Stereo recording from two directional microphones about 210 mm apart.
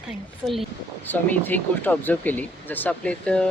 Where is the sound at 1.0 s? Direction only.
10° left (ahead or behind).